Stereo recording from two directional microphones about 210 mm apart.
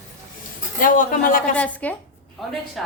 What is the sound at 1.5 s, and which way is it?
A woman's voice, 5° left (ahead or behind).